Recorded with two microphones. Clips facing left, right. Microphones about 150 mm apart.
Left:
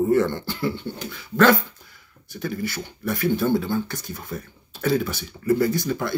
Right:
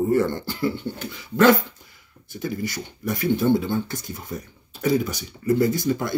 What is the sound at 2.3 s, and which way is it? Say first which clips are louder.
Speech: even; 20° right (ahead or behind).